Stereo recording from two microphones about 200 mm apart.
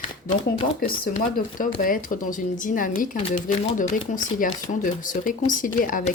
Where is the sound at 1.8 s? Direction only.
45° left (ahead or behind).